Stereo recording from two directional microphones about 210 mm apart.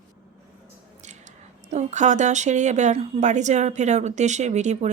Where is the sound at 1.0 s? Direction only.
35° right (ahead or behind).